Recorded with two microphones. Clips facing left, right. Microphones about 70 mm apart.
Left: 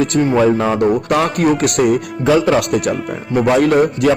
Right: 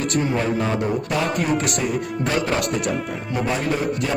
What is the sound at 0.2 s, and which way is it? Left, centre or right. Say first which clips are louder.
A man's voice: left 9 dB; left.